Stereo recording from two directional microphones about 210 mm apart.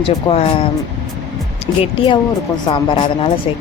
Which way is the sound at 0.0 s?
25° left (ahead or behind).